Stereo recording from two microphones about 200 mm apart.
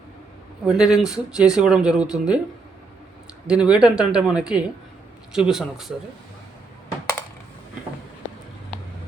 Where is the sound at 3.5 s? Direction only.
5° right (ahead or behind).